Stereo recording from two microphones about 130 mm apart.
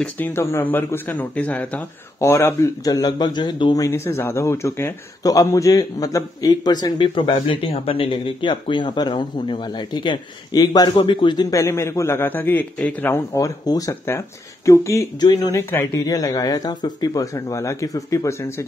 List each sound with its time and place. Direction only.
0.0 s speech: 15° left (ahead or behind)
2.1 s a man's voice: 20° left (ahead or behind)
3.8 s a man's voice: 20° left (ahead or behind); by 11.4 s 40° left (ahead or behind)
11.5 s a man's voice: 20° left (ahead or behind)
15.7 s a man's voice: 20° left (ahead or behind)